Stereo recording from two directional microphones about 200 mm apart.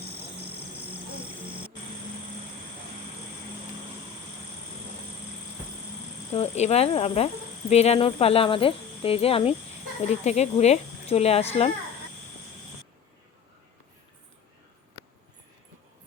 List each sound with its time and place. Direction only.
0.9 s music: 25° right (ahead or behind)
6.3 s speech: 30° left (ahead or behind)